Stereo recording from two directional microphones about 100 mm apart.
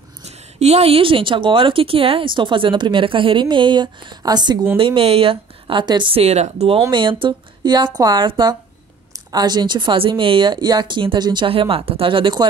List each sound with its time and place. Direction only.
0.6 s speech: 90° right; by 4.6 s 45° right (ahead or behind)
4.7 s speech: 65° right (ahead or behind)
6.1 s speech: 90° right
6.9 s speech: 55° right (ahead or behind)
9.3 s speech: 45° right (ahead or behind)
11.4 s speech: 65° right (ahead or behind)